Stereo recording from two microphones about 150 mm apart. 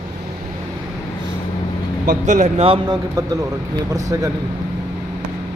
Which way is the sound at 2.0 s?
60° right (ahead or behind).